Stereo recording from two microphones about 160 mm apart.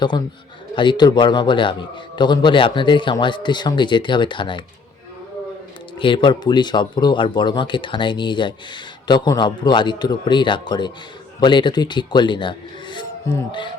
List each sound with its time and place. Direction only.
0.8 s speech: 30° left (ahead or behind)
6.0 s speech: 30° left (ahead or behind)